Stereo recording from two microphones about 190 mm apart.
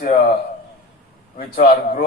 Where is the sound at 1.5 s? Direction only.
45° left (ahead or behind).